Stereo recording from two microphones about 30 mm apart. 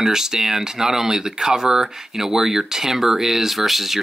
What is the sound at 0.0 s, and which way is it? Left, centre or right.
Speech, centre.